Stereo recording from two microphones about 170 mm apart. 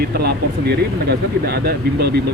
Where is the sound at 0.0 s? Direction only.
70° right (ahead or behind).